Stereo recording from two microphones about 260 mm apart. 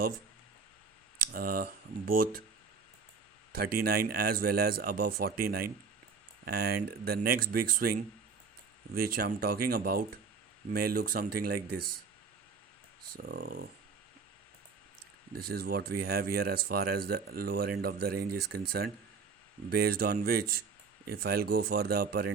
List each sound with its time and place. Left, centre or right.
1.2 s speech: right
3.8 s speech: right
9.0 s speech: right
13.2 s speech: right
15.4 s speech: right
19.7 s speech: right